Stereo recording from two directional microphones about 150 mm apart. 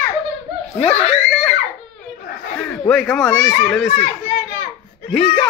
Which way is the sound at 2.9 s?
5° left (ahead or behind).